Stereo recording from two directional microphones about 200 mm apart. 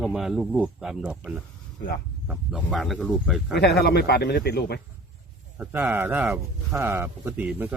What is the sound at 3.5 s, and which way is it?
A man's voice, 55° left (ahead or behind).